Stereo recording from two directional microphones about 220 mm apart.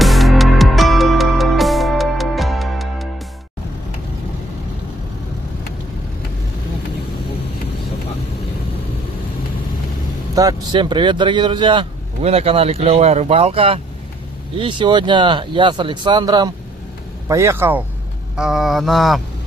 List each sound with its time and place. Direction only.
0.0 s music: centre (ahead or behind)
10.3 s speech: 20° right (ahead or behind)
18.3 s a sound: centre (ahead or behind)